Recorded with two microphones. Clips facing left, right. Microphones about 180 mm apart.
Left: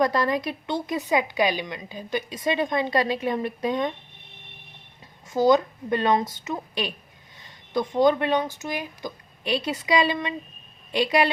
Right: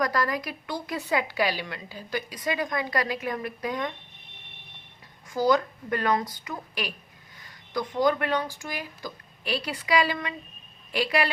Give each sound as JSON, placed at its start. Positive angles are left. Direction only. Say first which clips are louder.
{"t": 0.0, "sound": "speech", "louder": "left 4 dB", "side_deg": 25}
{"t": 5.3, "sound": "speech", "louder": "left 4 dB", "side_deg": 20}